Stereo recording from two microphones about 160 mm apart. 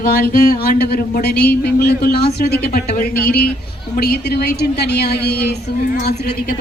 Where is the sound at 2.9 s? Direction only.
65° left (ahead or behind); by 5.5 s 90° left.